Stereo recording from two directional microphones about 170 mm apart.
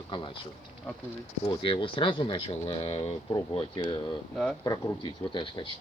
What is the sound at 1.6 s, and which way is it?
Speech, 30° left (ahead or behind).